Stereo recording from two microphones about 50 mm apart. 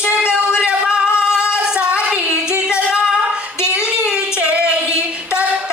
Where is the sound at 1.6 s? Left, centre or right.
Right.